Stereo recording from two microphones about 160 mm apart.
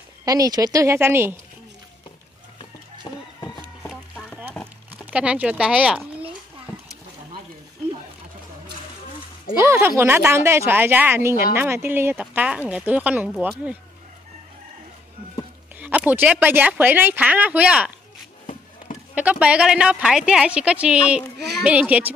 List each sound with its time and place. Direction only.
0.2 s speech: 20° right (ahead or behind)
2.6 s chicken: 25° left (ahead or behind)
3.9 s clip-clop: 5° left (ahead or behind)
5.1 s speech: 10° right (ahead or behind)
9.6 s speech: 15° right (ahead or behind)
15.8 s speech: 10° right (ahead or behind)
19.1 s speech: 10° right (ahead or behind)
21.4 s a child's voice: 90° right
21.6 s speech: 10° right (ahead or behind)